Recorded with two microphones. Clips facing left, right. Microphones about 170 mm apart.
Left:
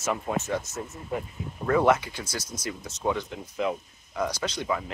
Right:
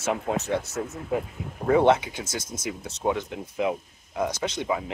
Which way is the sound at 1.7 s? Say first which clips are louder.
Right 2 dB; 25° right (ahead or behind).